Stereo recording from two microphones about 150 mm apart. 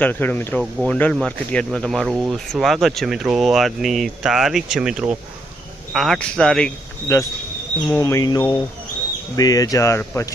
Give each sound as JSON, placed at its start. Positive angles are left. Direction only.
{"t": 0.0, "sound": "speech", "side_deg": 10}
{"t": 7.9, "sound": "speech", "side_deg": 20}